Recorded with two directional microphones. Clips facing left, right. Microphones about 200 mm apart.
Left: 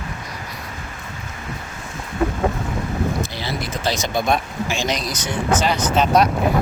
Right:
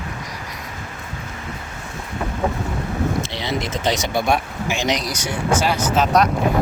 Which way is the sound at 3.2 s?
25° right (ahead or behind).